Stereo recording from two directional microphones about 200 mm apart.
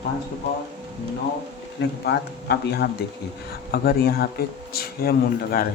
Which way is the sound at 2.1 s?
55° left (ahead or behind).